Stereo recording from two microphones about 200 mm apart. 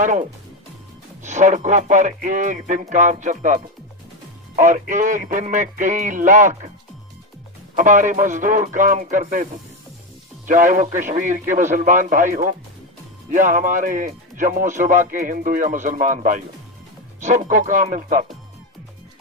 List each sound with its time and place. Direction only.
0.0 s speech: 40° right (ahead or behind)
7.8 s speech: 40° right (ahead or behind)